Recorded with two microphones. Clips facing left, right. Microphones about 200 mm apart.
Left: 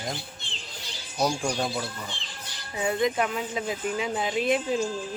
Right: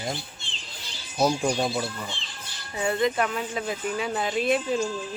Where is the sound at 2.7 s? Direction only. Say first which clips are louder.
Right 1 dB; 10° left (ahead or behind).